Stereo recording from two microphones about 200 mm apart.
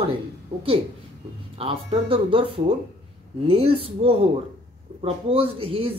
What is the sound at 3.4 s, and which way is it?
Speech, 25° right (ahead or behind).